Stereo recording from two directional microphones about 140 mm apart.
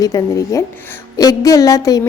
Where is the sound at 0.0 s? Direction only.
25° left (ahead or behind).